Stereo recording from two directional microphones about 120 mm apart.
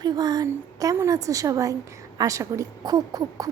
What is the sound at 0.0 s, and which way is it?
A woman's voice, 35° right (ahead or behind).